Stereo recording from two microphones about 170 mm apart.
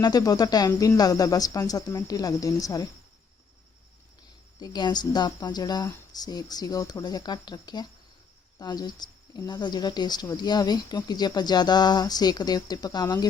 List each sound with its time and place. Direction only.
0.0 s speech: 20° left (ahead or behind)
4.6 s speech: 25° left (ahead or behind)